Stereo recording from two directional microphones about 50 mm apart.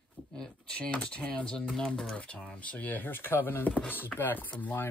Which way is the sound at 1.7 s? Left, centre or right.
Centre.